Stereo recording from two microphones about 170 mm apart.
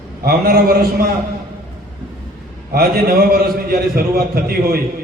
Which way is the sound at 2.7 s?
60° right (ahead or behind).